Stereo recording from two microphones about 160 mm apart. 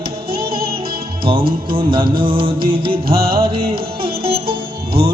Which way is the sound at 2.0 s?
65° right (ahead or behind).